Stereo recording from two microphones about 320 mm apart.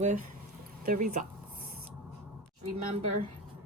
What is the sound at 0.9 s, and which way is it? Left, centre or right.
Speech, right.